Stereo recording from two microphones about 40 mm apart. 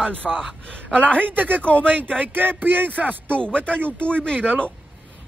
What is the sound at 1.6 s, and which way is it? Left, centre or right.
Speech, left.